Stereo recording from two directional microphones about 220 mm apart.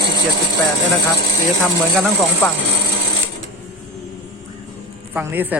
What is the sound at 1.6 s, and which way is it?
Speech, centre (ahead or behind).